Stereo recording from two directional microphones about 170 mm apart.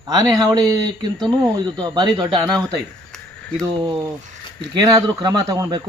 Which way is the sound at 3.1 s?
5° left (ahead or behind).